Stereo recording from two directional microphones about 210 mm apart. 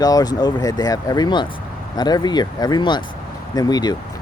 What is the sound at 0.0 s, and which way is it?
Speech, 20° left (ahead or behind).